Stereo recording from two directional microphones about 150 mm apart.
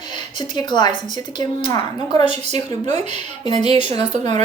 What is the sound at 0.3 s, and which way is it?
A woman's voice, 30° left (ahead or behind).